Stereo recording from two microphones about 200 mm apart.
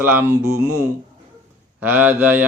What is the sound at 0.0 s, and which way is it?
Speech, 10° right (ahead or behind).